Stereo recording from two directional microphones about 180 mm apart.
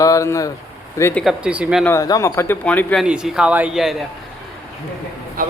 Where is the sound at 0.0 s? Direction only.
15° left (ahead or behind).